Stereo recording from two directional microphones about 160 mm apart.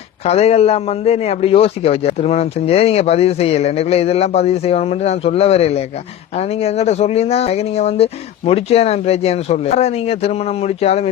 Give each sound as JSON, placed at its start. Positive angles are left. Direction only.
{"t": 0.3, "sound": "a man's voice", "side_deg": 40}